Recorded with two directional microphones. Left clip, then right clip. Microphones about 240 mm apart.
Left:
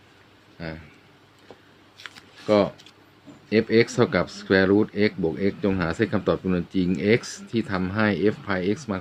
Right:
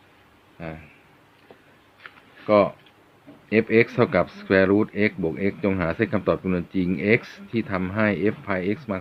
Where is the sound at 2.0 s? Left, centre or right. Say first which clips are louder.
Left 3 dB; left.